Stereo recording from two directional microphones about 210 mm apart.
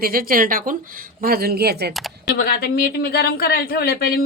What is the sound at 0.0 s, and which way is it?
Speech, 45° right (ahead or behind).